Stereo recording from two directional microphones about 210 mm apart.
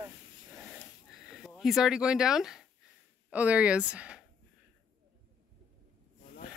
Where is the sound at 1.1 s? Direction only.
Centre (ahead or behind).